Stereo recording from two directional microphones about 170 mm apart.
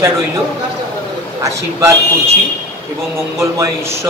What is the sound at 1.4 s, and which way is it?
Speech, 20° right (ahead or behind).